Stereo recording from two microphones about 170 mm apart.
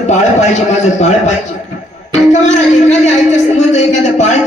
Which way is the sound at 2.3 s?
45° left (ahead or behind).